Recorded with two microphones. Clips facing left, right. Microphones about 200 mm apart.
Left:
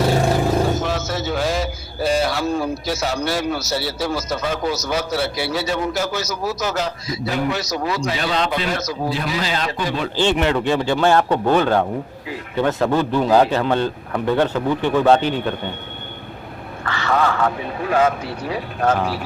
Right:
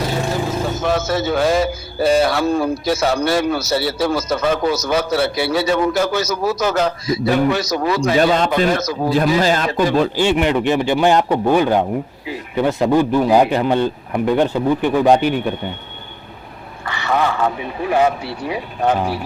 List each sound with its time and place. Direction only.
0.8 s a man's voice: 55° right (ahead or behind)
10.2 s a man's voice: 10° right (ahead or behind)
16.8 s a sound: 15° right (ahead or behind)
18.4 s a man's voice: 15° right (ahead or behind)